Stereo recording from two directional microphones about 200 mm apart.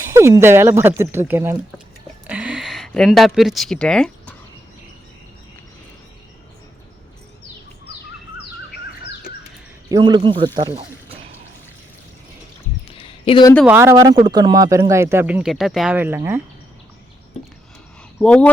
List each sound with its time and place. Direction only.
0.1 s speech: 15° right (ahead or behind)
2.2 s a sound: 5° right (ahead or behind)
9.9 s speech: 25° right (ahead or behind)
13.0 s a sound: 25° left (ahead or behind)
13.7 s speech: 10° right (ahead or behind)
18.2 s speech: 5° left (ahead or behind)